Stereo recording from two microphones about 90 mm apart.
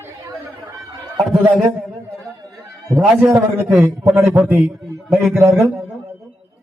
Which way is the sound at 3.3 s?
30° right (ahead or behind).